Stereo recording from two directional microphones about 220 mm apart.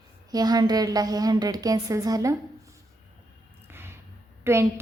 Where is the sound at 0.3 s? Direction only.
15° right (ahead or behind).